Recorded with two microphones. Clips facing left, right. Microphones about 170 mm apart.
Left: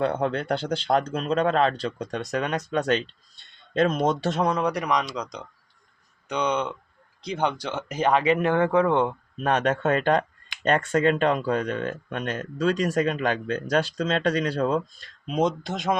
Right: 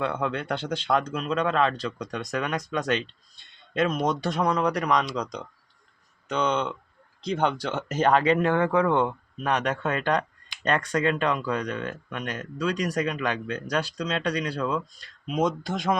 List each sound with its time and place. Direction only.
0.0 s speech: 35° left (ahead or behind)
4.0 s speech: 25° left (ahead or behind)
4.5 s speech: 5° left (ahead or behind)
8.2 s speech: 20° left (ahead or behind)
9.4 s speech: 35° left (ahead or behind)
10.1 s speech: 30° left (ahead or behind)
15.6 s speech: 20° left (ahead or behind)